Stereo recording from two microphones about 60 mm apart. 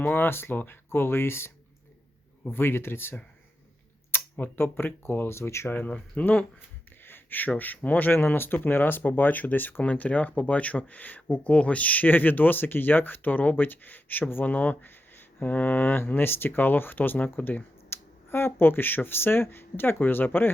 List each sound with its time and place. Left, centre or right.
0.0 s speech: left
5.7 s speech: left
7.0 s speech: left